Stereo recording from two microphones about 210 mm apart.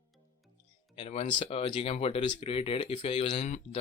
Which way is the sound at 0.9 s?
30° left (ahead or behind).